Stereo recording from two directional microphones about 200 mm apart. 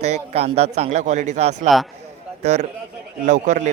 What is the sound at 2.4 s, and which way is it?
A man's voice, 35° right (ahead or behind).